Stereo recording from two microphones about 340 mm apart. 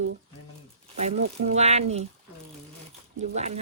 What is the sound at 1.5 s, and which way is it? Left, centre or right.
Speech, centre.